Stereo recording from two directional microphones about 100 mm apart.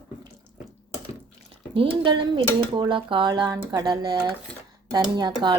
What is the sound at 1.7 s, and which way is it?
Speech, 60° right (ahead or behind).